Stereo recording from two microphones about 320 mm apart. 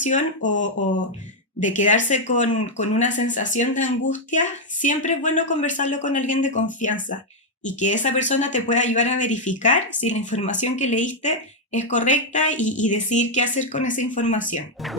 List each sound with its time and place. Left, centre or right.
0.0 s speech: left